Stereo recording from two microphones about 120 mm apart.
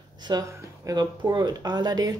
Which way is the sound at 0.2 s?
35° right (ahead or behind).